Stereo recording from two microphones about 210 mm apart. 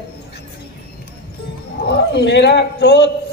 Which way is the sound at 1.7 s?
50° left (ahead or behind).